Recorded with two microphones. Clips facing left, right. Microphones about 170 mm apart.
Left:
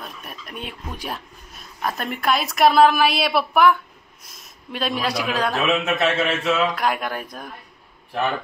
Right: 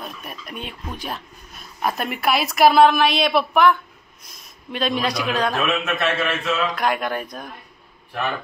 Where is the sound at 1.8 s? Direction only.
10° right (ahead or behind).